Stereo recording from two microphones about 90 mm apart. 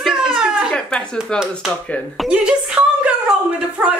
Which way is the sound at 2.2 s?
10° right (ahead or behind).